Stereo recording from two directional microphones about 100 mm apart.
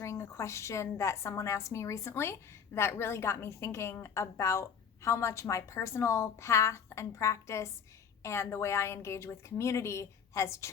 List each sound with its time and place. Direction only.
0.0 s a woman's voice: 30° left (ahead or behind)